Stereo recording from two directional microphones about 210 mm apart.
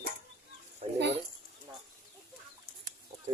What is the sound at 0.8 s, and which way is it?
Speech, 30° right (ahead or behind).